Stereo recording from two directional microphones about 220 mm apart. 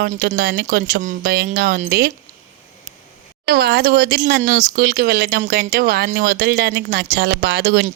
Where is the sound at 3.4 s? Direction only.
45° right (ahead or behind).